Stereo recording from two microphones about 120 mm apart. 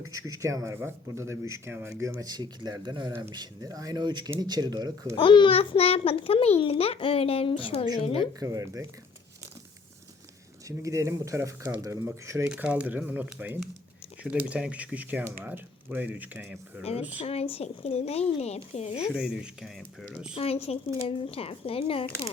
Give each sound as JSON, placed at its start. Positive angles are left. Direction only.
{"t": 0.1, "sound": "speech", "side_deg": -30}
{"t": 5.1, "sound": "a child's voice", "side_deg": 45}
{"t": 8.4, "sound": "speech", "side_deg": -30}
{"t": 10.7, "sound": "speech", "side_deg": -25}
{"t": 12.5, "sound": "speech", "side_deg": -10}
{"t": 17.1, "sound": "speech", "side_deg": 50}
{"t": 19.1, "sound": "speech", "side_deg": -5}
{"t": 20.2, "sound": "a child's voice", "side_deg": 50}